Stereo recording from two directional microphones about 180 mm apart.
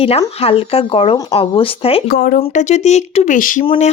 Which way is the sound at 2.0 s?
55° left (ahead or behind).